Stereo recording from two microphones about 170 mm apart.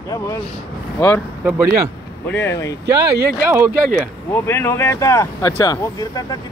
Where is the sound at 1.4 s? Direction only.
15° right (ahead or behind).